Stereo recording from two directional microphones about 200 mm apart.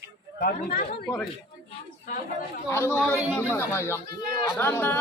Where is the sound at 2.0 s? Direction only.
40° left (ahead or behind).